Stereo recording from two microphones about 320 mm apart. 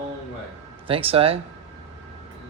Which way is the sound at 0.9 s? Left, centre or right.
Centre.